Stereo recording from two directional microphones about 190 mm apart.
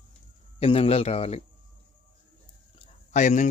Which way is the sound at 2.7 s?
40° left (ahead or behind).